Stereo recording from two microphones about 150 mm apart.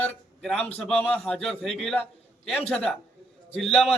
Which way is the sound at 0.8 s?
5° left (ahead or behind).